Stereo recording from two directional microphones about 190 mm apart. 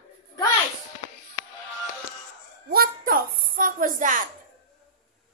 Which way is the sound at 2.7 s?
50° right (ahead or behind).